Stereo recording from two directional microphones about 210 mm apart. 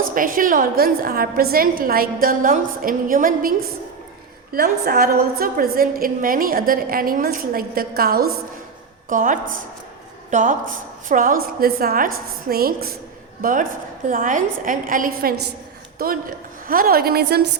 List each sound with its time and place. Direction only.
0.1 s a woman's voice: 40° right (ahead or behind)
4.5 s a woman's voice: 45° right (ahead or behind)